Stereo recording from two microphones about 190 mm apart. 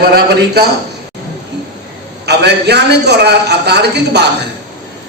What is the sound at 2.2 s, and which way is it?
A man's voice, 60° right (ahead or behind).